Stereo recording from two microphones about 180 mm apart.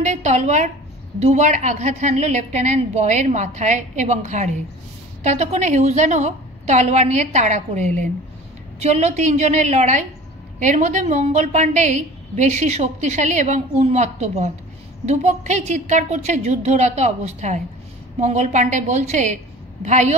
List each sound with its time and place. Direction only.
0.0 s a woman's voice: 40° right (ahead or behind)